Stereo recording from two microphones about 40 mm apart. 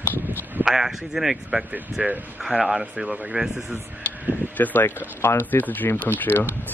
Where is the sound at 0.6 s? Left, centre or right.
Centre.